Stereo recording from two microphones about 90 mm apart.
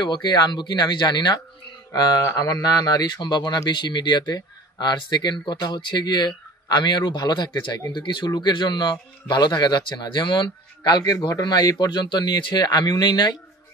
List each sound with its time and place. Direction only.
0.0 s speech: 55° left (ahead or behind)